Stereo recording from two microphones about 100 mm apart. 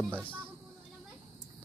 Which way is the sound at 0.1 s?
15° left (ahead or behind).